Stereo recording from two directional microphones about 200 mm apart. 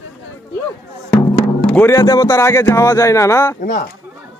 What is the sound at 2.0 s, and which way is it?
Speech, 20° left (ahead or behind).